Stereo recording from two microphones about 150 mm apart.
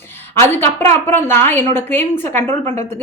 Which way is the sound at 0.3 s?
15° left (ahead or behind).